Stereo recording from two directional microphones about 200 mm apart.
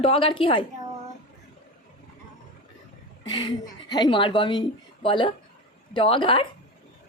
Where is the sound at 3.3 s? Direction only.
20° left (ahead or behind).